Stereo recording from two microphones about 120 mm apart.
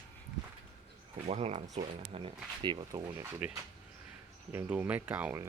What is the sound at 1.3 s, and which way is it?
Speech, 65° right (ahead or behind).